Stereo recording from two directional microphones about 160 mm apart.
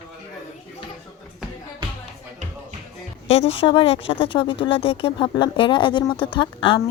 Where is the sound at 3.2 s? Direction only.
40° left (ahead or behind).